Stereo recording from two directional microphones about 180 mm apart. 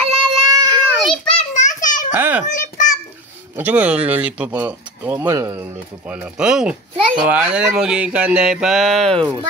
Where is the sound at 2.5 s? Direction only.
45° left (ahead or behind).